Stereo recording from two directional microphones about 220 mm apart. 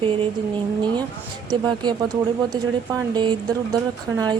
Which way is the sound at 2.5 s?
15° right (ahead or behind).